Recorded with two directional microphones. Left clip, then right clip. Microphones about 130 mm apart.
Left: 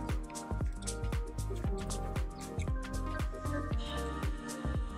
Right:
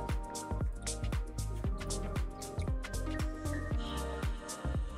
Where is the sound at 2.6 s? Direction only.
Centre (ahead or behind).